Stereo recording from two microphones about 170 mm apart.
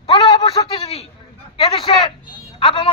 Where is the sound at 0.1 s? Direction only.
25° left (ahead or behind).